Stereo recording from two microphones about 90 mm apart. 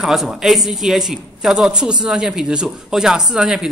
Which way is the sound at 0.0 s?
5° right (ahead or behind).